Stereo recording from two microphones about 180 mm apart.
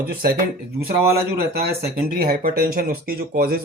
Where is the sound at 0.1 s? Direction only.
55° right (ahead or behind).